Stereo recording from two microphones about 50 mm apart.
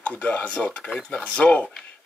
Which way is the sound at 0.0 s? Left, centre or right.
Left.